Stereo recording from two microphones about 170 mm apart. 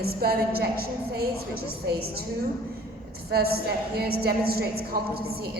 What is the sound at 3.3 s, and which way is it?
A woman's voice, 65° right (ahead or behind).